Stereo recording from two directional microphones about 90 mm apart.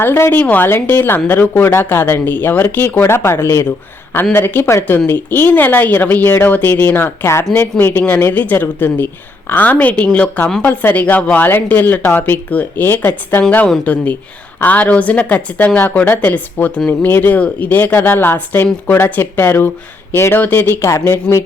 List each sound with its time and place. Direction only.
0.0 s a woman's voice: 25° left (ahead or behind)